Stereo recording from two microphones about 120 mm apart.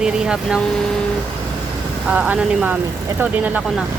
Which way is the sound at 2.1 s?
10° right (ahead or behind).